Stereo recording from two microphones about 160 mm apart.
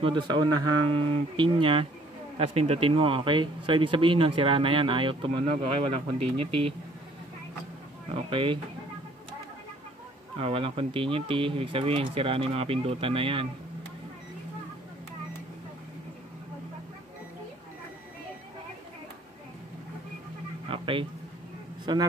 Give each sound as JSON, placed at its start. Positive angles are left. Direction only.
{"t": 0.0, "sound": "speech", "side_deg": -30}
{"t": 8.1, "sound": "speech", "side_deg": -35}
{"t": 10.3, "sound": "speech", "side_deg": -35}
{"t": 20.7, "sound": "a sound", "side_deg": -35}
{"t": 21.9, "sound": "a man's voice", "side_deg": -25}